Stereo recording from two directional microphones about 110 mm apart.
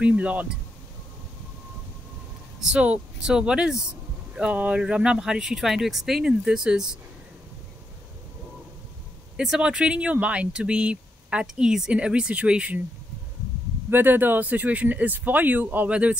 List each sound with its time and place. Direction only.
0.0 s speech: 10° right (ahead or behind)
2.6 s speech: 10° right (ahead or behind)
9.4 s speech: 5° right (ahead or behind)
13.8 s speech: 20° right (ahead or behind)